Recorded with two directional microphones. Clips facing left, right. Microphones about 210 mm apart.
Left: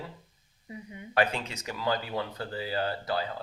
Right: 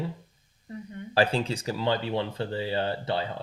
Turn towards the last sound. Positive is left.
turn(degrees=-25)  # may be behind; listen again after turning